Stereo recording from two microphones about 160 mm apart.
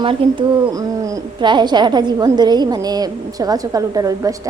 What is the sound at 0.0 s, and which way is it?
A woman's voice, 30° right (ahead or behind).